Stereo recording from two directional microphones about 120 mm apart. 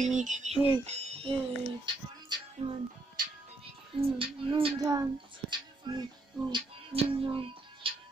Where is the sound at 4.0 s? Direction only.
50° right (ahead or behind).